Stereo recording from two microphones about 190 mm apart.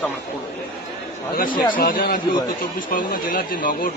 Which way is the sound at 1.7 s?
45° left (ahead or behind).